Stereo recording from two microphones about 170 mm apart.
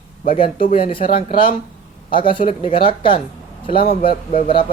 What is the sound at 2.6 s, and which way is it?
Speech, 30° left (ahead or behind).